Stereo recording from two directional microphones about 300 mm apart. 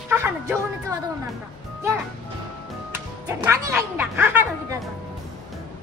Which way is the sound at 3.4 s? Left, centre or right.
Centre.